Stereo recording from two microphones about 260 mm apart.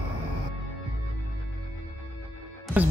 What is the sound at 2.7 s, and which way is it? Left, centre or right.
Music, centre.